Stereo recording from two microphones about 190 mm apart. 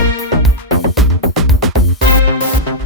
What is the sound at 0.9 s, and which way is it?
Music, centre (ahead or behind).